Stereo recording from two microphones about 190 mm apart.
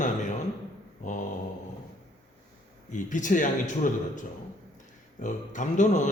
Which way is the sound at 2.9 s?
40° left (ahead or behind).